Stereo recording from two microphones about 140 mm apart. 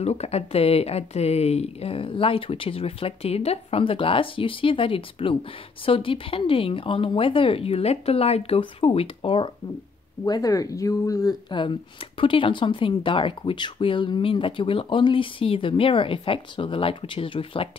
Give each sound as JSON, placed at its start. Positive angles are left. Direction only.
{"t": 0.0, "sound": "speech", "side_deg": 50}
{"t": 10.2, "sound": "speech", "side_deg": 25}